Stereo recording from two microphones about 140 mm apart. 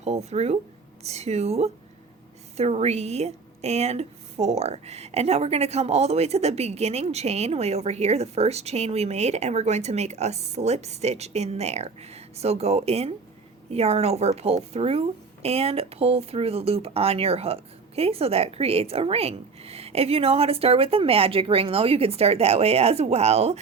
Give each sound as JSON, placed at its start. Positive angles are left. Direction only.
{"t": 0.0, "sound": "a woman's voice", "side_deg": -50}